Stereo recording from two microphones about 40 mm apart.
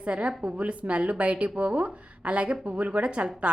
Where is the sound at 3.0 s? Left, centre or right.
Right.